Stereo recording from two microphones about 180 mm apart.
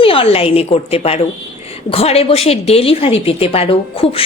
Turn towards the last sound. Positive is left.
turn(degrees=30)  # may be behind; listen again after turning